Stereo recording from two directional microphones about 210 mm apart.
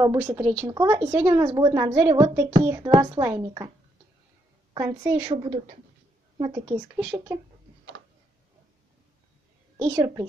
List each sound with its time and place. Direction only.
0.0 s speech: 15° right (ahead or behind)
4.7 s a woman's voice: 15° right (ahead or behind)
9.8 s speech: 20° right (ahead or behind)